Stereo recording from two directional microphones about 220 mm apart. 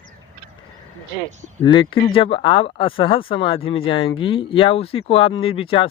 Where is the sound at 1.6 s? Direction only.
20° left (ahead or behind).